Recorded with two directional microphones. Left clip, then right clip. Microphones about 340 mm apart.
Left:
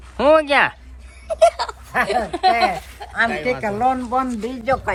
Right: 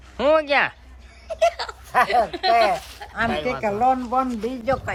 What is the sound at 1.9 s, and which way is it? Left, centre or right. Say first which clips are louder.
Speech: right 1 dB; centre.